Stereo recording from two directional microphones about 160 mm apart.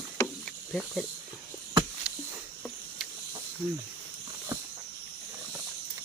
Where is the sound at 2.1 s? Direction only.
5° right (ahead or behind).